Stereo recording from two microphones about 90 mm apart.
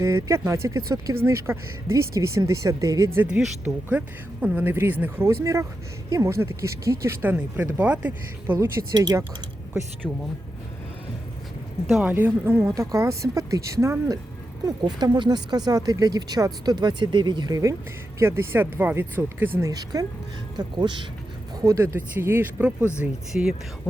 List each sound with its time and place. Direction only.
0.0 s speech: 35° right (ahead or behind)
3.2 s speech: 10° right (ahead or behind); by 7.2 s 30° right (ahead or behind)
7.2 s speech: 20° right (ahead or behind)
8.9 s speech: 50° right (ahead or behind)
12.0 s speech: 20° right (ahead or behind)
14.8 s speech: 50° right (ahead or behind)
18.2 s speech: 25° right (ahead or behind)
19.6 s speech: 40° right (ahead or behind)
20.6 s speech: 60° right (ahead or behind)
21.6 s speech: 35° right (ahead or behind)
21.9 s speech: 25° right (ahead or behind)
23.0 s speech: 5° right (ahead or behind)